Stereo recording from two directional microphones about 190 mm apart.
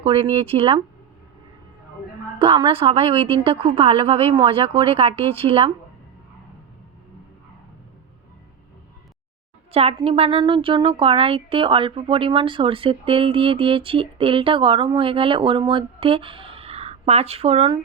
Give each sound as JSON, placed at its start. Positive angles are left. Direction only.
{"t": 0.0, "sound": "speech", "side_deg": -30}
{"t": 2.4, "sound": "a woman's voice", "side_deg": -30}
{"t": 9.7, "sound": "a woman's voice", "side_deg": -30}